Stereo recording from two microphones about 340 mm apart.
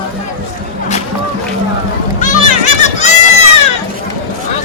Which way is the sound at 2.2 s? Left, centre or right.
Left.